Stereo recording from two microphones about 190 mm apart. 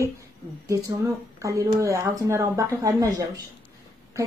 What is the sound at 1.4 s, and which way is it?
A woman's voice, 15° right (ahead or behind).